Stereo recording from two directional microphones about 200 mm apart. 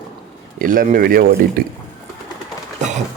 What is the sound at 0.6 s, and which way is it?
Speech, 45° right (ahead or behind).